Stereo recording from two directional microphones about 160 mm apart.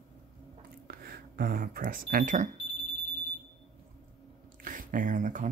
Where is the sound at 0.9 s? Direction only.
70° right (ahead or behind); by 2.4 s 55° right (ahead or behind).